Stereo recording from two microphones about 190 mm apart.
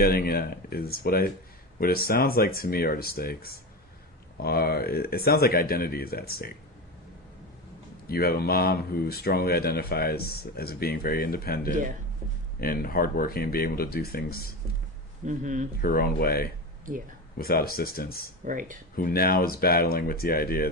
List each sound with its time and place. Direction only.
0.0 s speech: 50° left (ahead or behind)
8.0 s speech: 55° left (ahead or behind)
15.3 s speech: 40° right (ahead or behind)
15.8 s speech: 50° left (ahead or behind)
18.4 s speech: 45° right (ahead or behind)
18.9 s speech: 50° left (ahead or behind)